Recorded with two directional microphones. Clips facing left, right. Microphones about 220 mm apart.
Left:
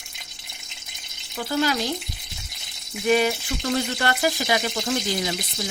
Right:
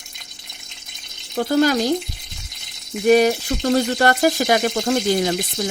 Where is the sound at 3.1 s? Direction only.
45° right (ahead or behind).